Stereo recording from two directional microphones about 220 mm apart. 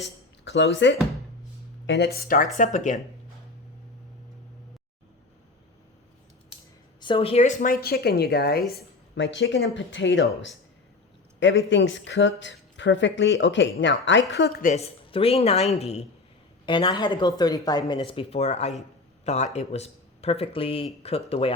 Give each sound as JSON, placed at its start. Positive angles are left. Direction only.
{"t": 0.4, "sound": "speech", "side_deg": 55}
{"t": 2.1, "sound": "speech", "side_deg": 40}
{"t": 7.0, "sound": "a woman's voice", "side_deg": 25}
{"t": 11.3, "sound": "speech", "side_deg": 55}
{"t": 14.7, "sound": "speech", "side_deg": 25}
{"t": 18.8, "sound": "a sound", "side_deg": 30}
{"t": 19.5, "sound": "speech", "side_deg": 30}